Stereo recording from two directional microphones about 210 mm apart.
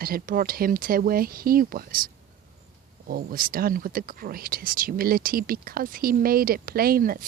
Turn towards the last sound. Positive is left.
turn(degrees=-45)  # may be behind; listen again after turning